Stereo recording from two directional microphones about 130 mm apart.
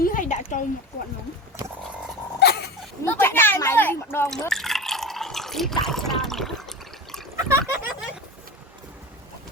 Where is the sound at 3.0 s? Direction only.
15° left (ahead or behind).